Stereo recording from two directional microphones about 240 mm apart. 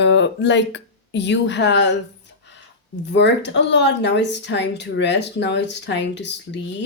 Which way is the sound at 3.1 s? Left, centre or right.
Left.